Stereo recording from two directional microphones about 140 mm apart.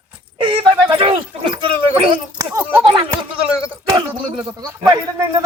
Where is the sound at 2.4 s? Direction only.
15° right (ahead or behind).